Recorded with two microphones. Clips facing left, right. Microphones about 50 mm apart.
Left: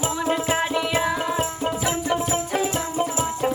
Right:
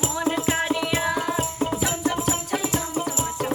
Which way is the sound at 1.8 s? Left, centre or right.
Left.